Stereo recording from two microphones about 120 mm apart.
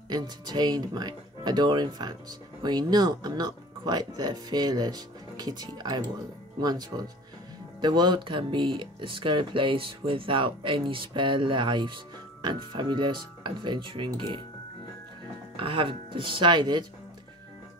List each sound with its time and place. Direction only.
0.1 s speech: 35° right (ahead or behind)
15.5 s speech: 45° right (ahead or behind)